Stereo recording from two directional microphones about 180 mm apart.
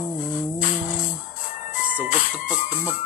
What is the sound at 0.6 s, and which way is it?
Humming, 45° left (ahead or behind).